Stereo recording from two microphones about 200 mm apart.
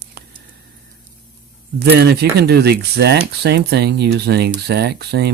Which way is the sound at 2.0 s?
55° right (ahead or behind).